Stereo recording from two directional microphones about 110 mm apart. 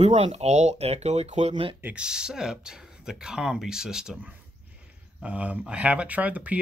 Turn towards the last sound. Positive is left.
turn(degrees=-15)  # may be behind; listen again after turning